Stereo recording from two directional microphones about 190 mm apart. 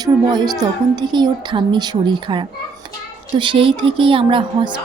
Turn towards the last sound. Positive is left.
turn(degrees=-25)  # may be behind; listen again after turning